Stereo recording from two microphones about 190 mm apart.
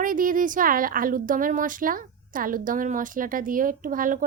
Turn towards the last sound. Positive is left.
turn(degrees=-45)  # may be behind; listen again after turning